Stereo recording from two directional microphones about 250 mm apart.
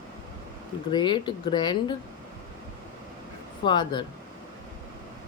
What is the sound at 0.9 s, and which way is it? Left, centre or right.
Speech, centre.